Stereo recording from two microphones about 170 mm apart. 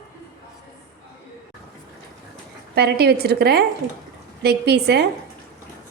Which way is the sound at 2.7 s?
70° right (ahead or behind).